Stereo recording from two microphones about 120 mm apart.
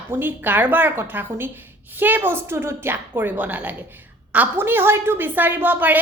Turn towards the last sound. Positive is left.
turn(degrees=-15)  # may be behind; listen again after turning